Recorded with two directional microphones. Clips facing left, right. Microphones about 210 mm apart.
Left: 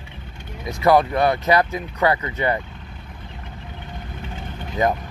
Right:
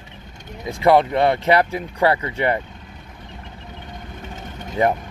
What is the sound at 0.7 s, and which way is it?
Speech, 25° right (ahead or behind).